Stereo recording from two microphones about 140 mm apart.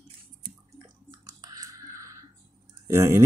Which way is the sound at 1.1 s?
25° right (ahead or behind).